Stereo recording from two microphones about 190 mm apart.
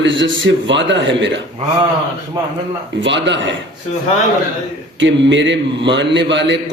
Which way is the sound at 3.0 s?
70° right (ahead or behind).